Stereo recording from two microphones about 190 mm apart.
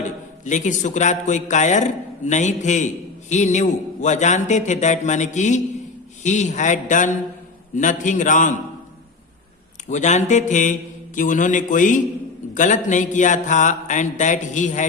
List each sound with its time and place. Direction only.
0.4 s a man's voice: 40° left (ahead or behind)
9.9 s a man's voice: 40° left (ahead or behind)